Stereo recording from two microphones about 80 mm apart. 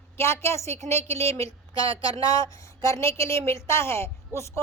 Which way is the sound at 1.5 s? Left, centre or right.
Left.